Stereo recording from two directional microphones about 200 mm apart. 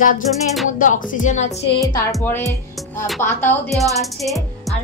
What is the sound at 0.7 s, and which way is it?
Speech, 40° left (ahead or behind).